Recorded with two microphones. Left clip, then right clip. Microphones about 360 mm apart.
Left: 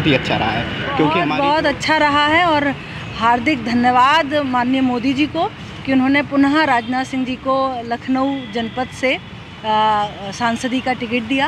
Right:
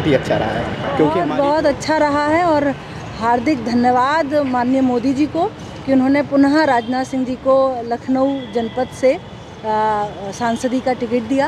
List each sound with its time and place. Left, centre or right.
0.0 s speech: left